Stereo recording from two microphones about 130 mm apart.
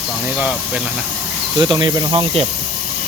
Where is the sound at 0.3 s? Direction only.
10° right (ahead or behind).